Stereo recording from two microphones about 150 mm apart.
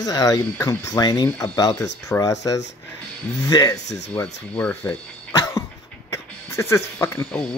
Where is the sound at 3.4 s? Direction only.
25° left (ahead or behind).